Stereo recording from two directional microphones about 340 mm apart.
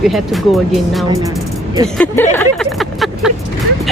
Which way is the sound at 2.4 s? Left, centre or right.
Centre.